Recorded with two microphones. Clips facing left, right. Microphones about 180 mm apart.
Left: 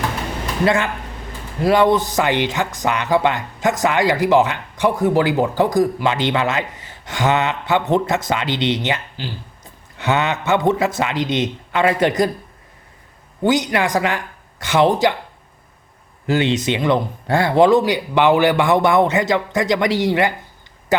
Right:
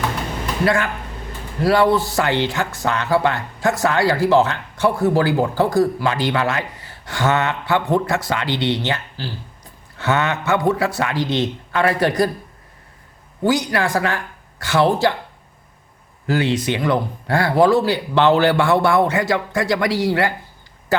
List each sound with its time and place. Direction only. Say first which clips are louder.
0.6 s speech: left 2 dB; 20° left (ahead or behind)
13.4 s speech: left 1 dB; 20° left (ahead or behind)
16.2 s speech: left 1 dB; 20° left (ahead or behind)